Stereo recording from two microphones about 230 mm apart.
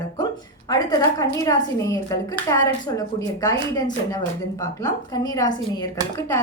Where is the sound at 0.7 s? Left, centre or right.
Centre.